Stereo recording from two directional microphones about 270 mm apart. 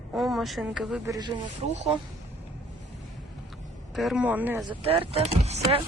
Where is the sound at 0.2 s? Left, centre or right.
Centre.